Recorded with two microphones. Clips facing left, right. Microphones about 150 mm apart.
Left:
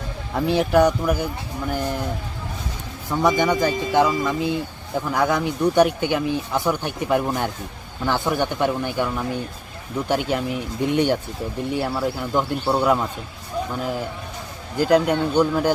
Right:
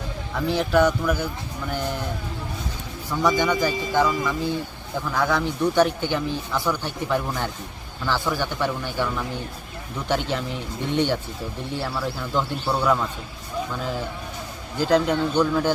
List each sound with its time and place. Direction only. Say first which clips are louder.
0.3 s speech: left 3 dB; 15° left (ahead or behind)
3.1 s speech: left 2 dB; 20° left (ahead or behind)
14.8 s speech: left 2 dB; 10° left (ahead or behind)